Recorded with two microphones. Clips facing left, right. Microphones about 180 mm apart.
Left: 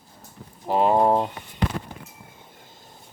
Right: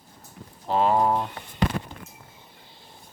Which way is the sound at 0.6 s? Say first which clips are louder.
Left 2 dB; 15° left (ahead or behind).